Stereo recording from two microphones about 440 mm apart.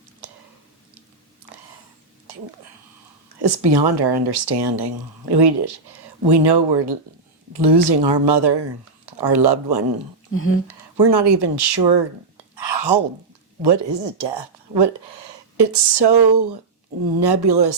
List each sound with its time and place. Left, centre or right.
0.2 s clicking: right
2.3 s a sound: right
3.2 s speech: right
10.3 s speech: left
10.9 s speech: right
12.5 s whispering: right
13.6 s speech: right
17.2 s speech: right